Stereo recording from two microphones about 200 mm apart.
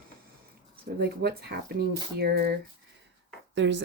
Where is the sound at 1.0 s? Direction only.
50° right (ahead or behind).